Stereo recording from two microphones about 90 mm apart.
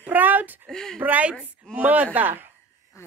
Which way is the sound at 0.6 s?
5° left (ahead or behind).